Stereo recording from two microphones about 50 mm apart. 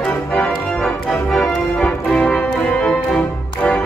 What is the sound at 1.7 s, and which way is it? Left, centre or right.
Music, left.